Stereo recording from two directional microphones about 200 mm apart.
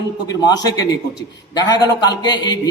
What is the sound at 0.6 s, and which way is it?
A man's voice, 20° left (ahead or behind).